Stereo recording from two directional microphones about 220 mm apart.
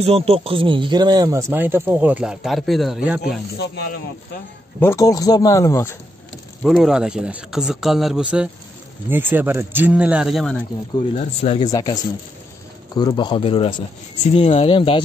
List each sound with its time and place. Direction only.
0.0 s speech: 25° right (ahead or behind); by 3.2 s 5° right (ahead or behind)
3.5 s speech: 45° left (ahead or behind)
4.7 s speech: 10° left (ahead or behind)
6.6 s speech: 5° right (ahead or behind)
11.1 s speech: 30° left (ahead or behind)
11.7 s speech: 15° left (ahead or behind)